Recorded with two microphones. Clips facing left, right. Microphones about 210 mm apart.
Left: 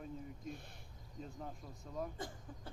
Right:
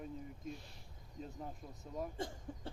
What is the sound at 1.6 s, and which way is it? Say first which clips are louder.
Speech: even; 20° right (ahead or behind).